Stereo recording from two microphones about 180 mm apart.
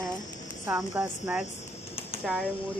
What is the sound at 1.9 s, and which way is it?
Typing, 35° left (ahead or behind).